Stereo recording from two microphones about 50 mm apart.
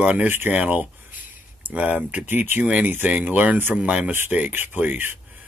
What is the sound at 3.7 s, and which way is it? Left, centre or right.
Speech, right.